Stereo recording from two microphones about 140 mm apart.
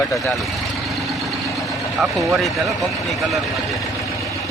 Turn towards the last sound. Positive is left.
turn(degrees=0)  # may be behind; listen again after turning